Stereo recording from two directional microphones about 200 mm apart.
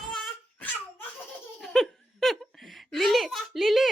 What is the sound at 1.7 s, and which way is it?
Giggle, centre (ahead or behind).